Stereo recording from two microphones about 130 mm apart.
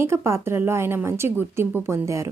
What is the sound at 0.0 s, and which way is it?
A woman's voice, 20° right (ahead or behind).